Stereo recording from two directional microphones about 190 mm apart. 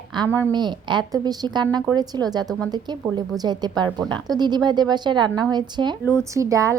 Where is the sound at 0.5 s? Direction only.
25° right (ahead or behind).